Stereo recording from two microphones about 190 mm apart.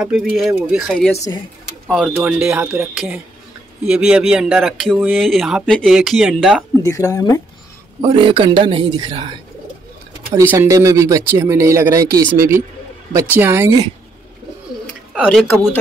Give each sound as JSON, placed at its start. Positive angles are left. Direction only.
{"t": 0.0, "sound": "speech", "side_deg": 0}
{"t": 6.8, "sound": "speech", "side_deg": 15}
{"t": 8.0, "sound": "speech", "side_deg": -25}
{"t": 10.5, "sound": "speech", "side_deg": -10}
{"t": 15.2, "sound": "speech", "side_deg": 5}